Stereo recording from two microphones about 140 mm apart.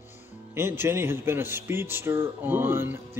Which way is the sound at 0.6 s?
20° right (ahead or behind).